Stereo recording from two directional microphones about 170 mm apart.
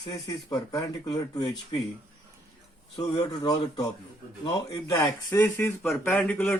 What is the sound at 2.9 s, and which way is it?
Speech, 20° left (ahead or behind).